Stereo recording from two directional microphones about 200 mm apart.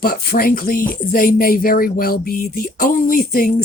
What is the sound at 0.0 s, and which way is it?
Speech, 45° left (ahead or behind).